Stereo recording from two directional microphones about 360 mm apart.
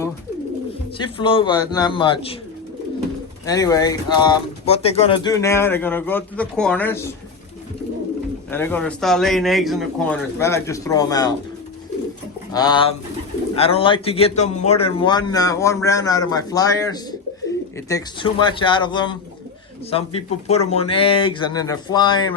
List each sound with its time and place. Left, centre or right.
1.2 s speech: centre
3.4 s speech: centre
8.4 s a man's voice: centre
12.5 s speech: centre